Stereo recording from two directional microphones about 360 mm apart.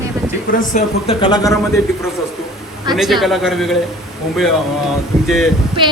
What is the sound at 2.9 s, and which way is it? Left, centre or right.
Speech, centre.